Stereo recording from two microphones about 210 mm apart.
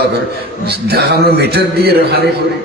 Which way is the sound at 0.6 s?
50° right (ahead or behind).